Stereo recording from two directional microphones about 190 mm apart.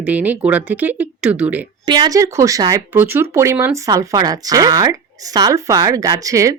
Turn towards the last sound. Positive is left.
turn(degrees=-15)  # may be behind; listen again after turning